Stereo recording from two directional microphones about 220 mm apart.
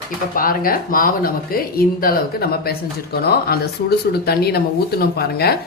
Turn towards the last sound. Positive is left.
turn(degrees=45)  # may be behind; listen again after turning